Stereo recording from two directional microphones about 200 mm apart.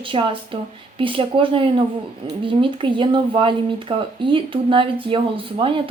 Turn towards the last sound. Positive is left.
turn(degrees=-25)  # may be behind; listen again after turning